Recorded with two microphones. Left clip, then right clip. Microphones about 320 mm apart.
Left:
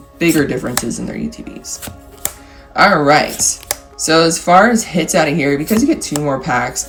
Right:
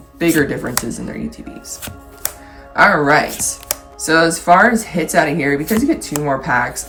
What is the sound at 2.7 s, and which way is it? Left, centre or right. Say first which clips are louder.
Speech: left 1 dB; centre.